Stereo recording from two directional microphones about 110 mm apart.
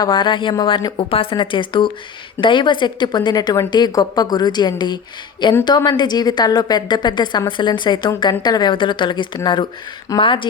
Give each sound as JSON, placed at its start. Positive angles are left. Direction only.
{"t": 0.0, "sound": "a woman's voice", "side_deg": 40}
{"t": 0.9, "sound": "a woman's voice", "side_deg": 55}